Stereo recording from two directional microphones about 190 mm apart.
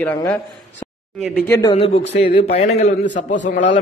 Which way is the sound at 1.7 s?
30° left (ahead or behind).